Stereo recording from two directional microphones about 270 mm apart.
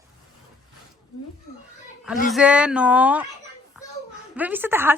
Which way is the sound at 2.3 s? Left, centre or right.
Centre.